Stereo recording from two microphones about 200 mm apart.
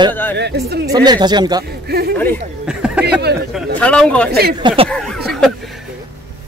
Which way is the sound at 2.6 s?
5° right (ahead or behind).